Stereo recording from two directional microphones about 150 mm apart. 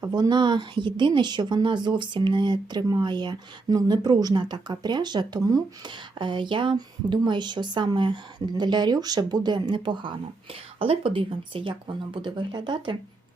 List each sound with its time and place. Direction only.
0.0 s a woman's voice: 25° right (ahead or behind)